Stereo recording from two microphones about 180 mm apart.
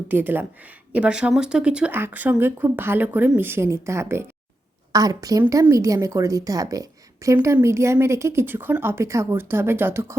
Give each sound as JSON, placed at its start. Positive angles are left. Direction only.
{"t": 0.1, "sound": "a woman's voice", "side_deg": -10}